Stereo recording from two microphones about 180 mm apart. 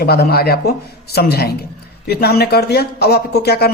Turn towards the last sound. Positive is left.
turn(degrees=60)  # may be behind; listen again after turning